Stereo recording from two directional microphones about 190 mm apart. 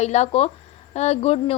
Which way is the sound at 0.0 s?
35° left (ahead or behind).